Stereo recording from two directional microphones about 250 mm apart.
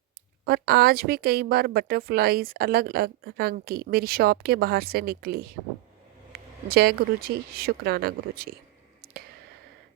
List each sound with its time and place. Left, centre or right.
0.4 s a woman's voice: right
6.7 s a woman's voice: right